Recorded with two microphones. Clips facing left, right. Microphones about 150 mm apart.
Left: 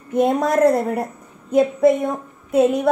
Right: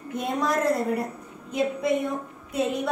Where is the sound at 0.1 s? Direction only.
50° left (ahead or behind).